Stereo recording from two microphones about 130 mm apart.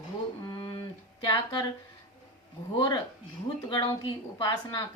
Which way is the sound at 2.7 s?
35° left (ahead or behind).